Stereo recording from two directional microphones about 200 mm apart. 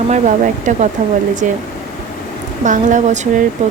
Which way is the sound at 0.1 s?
35° right (ahead or behind).